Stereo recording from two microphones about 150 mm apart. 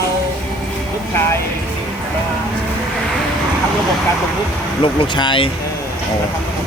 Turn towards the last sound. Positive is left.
turn(degrees=35)  # may be behind; listen again after turning